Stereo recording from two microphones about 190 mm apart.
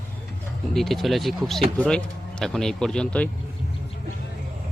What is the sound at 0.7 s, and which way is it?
Speech, centre (ahead or behind).